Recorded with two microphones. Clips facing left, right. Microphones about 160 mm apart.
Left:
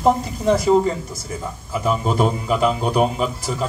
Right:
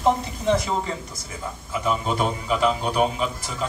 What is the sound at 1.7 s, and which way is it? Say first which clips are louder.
A man's voice: left 3 dB; 40° left (ahead or behind).